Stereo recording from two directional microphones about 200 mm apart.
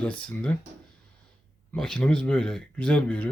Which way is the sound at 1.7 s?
5° left (ahead or behind).